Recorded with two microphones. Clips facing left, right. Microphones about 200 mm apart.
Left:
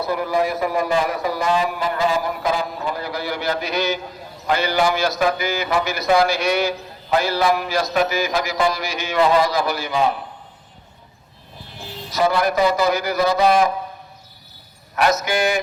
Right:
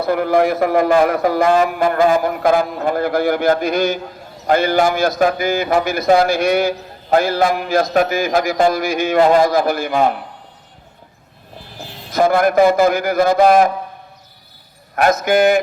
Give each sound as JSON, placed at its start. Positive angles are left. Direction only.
{"t": 0.0, "sound": "a man's voice", "side_deg": -55}
{"t": 12.1, "sound": "a man's voice", "side_deg": -50}
{"t": 14.9, "sound": "a man's voice", "side_deg": -50}